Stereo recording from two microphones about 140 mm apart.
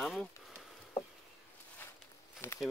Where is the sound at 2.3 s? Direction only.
20° left (ahead or behind).